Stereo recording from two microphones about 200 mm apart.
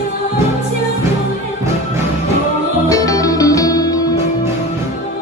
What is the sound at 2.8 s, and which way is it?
Music, 15° left (ahead or behind).